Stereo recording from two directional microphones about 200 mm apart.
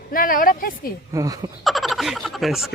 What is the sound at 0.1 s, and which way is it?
Speech, 45° left (ahead or behind).